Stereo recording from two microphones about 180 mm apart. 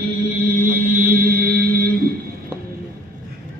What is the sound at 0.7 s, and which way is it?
Music, 50° right (ahead or behind).